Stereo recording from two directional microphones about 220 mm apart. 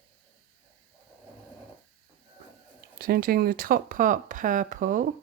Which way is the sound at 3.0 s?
45° right (ahead or behind).